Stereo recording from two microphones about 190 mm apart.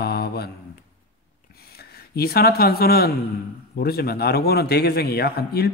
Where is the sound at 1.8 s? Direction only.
55° left (ahead or behind).